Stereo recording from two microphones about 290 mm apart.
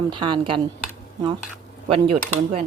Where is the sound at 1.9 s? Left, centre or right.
Centre.